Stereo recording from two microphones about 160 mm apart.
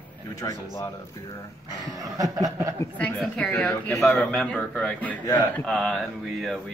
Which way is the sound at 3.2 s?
5° left (ahead or behind).